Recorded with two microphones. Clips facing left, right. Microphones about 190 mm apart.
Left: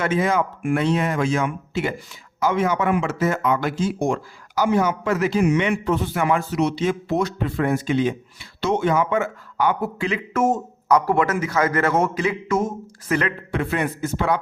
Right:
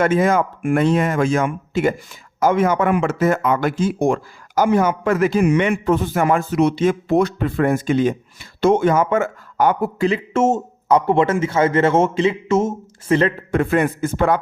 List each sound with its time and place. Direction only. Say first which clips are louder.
0.0 s a man's voice: right 5 dB; 45° right (ahead or behind)
10.1 s a man's voice: right 2 dB; 25° right (ahead or behind)
13.5 s a man's voice: right 6 dB; 45° right (ahead or behind)